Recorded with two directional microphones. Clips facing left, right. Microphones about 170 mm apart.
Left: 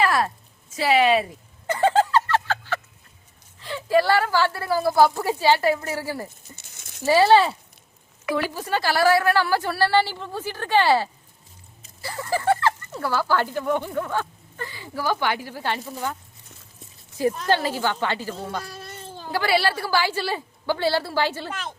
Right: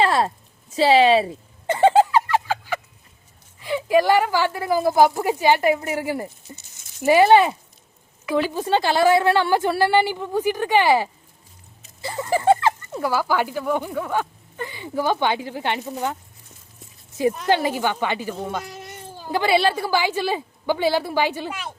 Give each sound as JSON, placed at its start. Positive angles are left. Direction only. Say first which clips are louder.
{"t": 0.0, "sound": "a sound", "louder": "right 2 dB", "side_deg": -25}
{"t": 3.6, "sound": "speech", "louder": "right 2 dB", "side_deg": -15}
{"t": 17.2, "sound": "speech", "louder": "right 2 dB", "side_deg": -15}